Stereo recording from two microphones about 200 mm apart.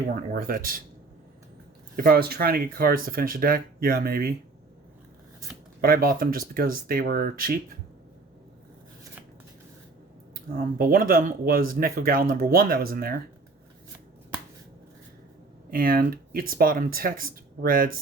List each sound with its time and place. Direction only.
0.1 s speech: 45° right (ahead or behind)
2.0 s speech: 50° right (ahead or behind)
5.8 s speech: 45° right (ahead or behind)
10.3 s speech: 45° right (ahead or behind)
15.7 s speech: 45° right (ahead or behind)